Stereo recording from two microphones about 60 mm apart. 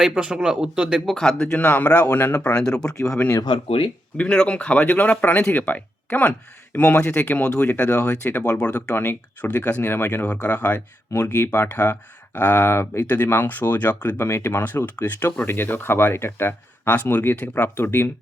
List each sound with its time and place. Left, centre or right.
0.0 s speech: centre
1.0 s speech: centre
1.5 s speech: left
2.1 s speech: left
2.4 s speech: left
4.2 s speech: centre
8.4 s speech: centre
9.0 s speech: left
9.8 s speech: left
10.2 s speech: left
11.1 s speech: left
14.2 s speech: left
14.9 s speech: left
17.1 s speech: left